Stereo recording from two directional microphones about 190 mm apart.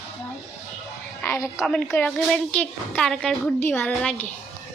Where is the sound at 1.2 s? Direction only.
15° left (ahead or behind).